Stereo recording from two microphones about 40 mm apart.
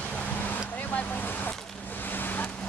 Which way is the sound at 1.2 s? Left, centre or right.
Left.